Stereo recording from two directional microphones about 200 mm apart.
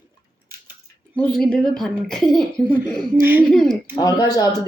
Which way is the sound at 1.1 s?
5° left (ahead or behind).